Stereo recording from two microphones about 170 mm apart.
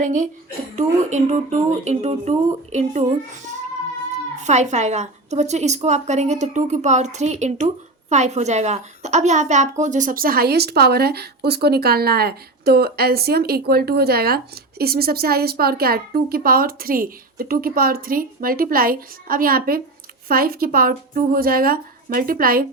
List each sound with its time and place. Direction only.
0.0 s a woman's voice: 50° right (ahead or behind)